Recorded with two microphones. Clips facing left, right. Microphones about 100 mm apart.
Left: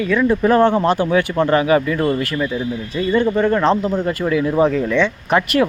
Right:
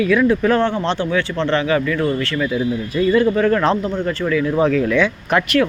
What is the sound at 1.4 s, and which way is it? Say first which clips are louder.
Speech: left 3 dB; 15° left (ahead or behind).